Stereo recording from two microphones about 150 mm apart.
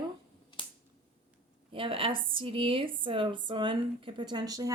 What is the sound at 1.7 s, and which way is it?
A woman's voice, 35° right (ahead or behind).